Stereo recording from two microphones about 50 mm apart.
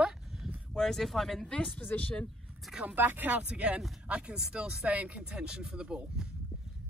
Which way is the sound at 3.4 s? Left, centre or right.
Right.